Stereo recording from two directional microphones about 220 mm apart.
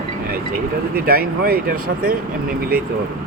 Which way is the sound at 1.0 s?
40° right (ahead or behind).